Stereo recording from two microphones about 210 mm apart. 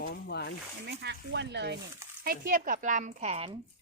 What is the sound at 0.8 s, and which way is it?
Speech, 55° right (ahead or behind).